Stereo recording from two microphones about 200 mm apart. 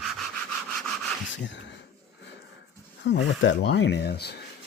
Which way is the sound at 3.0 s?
65° left (ahead or behind).